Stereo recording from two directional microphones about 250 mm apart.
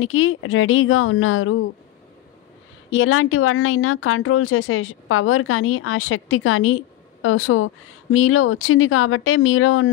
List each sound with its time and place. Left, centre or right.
0.0 s a woman's voice: left
2.9 s speech: left